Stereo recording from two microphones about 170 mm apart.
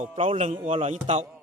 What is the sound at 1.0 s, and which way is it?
Speech, 40° right (ahead or behind).